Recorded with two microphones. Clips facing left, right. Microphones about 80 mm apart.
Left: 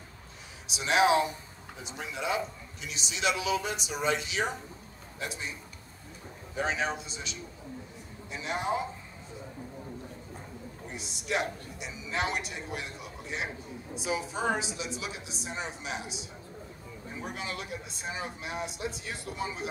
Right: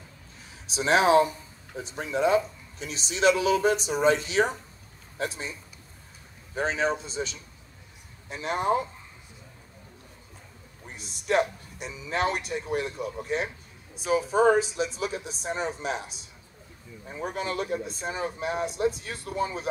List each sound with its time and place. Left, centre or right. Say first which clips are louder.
0.7 s a man's voice: right 3 dB; right
6.5 s a man's voice: right 4 dB; right
11.0 s a man's voice: right 7 dB; right
17.2 s a man's voice: right 8 dB; right